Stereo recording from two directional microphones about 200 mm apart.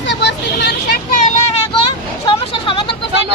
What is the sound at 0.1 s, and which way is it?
Vehicle, 60° left (ahead or behind).